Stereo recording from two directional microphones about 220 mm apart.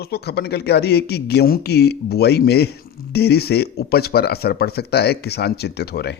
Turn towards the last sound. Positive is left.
turn(degrees=45)  # may be behind; listen again after turning